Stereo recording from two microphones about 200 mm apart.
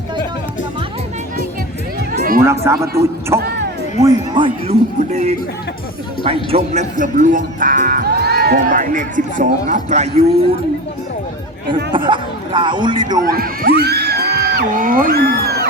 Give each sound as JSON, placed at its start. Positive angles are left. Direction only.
{"t": 2.1, "sound": "a sound", "side_deg": -45}
{"t": 2.6, "sound": "speech", "side_deg": -15}
{"t": 4.0, "sound": "a man's voice", "side_deg": -25}
{"t": 11.9, "sound": "speech", "side_deg": -25}
{"t": 13.2, "sound": "speech", "side_deg": -45}